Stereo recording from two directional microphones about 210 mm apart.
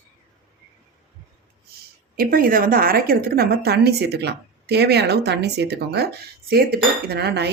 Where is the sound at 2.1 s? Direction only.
45° right (ahead or behind).